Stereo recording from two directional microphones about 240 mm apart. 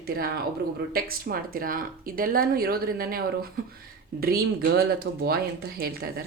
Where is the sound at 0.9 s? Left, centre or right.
Right.